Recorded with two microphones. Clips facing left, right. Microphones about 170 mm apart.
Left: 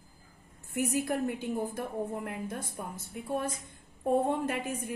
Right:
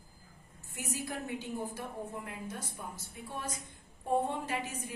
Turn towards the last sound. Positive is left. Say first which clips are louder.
# left 5 dB
turn(degrees=55)  # may be behind; listen again after turning